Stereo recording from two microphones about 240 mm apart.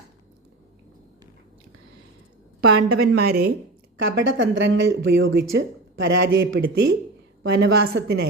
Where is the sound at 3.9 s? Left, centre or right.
Right.